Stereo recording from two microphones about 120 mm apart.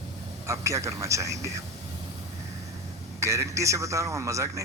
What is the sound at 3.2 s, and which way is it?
A man's voice, 25° right (ahead or behind).